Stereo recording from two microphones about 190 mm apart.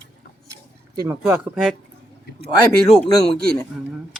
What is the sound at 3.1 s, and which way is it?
Speech, 20° left (ahead or behind).